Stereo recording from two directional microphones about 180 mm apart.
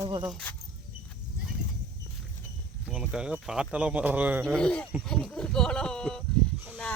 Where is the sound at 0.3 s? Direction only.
5° left (ahead or behind).